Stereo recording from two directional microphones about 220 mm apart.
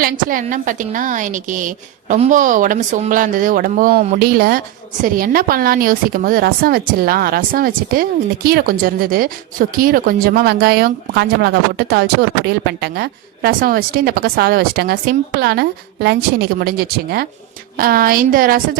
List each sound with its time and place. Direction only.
0.0 s a woman's voice: 40° right (ahead or behind)